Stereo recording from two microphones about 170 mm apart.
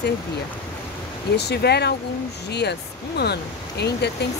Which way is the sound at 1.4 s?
75° left (ahead or behind).